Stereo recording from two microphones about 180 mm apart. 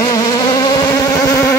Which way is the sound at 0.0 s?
25° left (ahead or behind).